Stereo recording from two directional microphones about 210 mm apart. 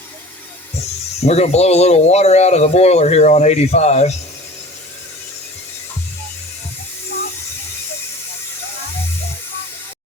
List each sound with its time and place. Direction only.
1.2 s speech: 30° left (ahead or behind)